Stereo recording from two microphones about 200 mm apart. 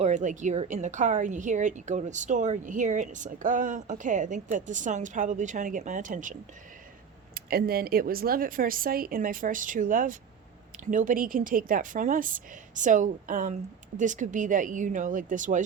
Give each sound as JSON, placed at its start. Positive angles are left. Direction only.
{"t": 0.0, "sound": "a woman's voice", "side_deg": -35}
{"t": 7.3, "sound": "a woman's voice", "side_deg": -50}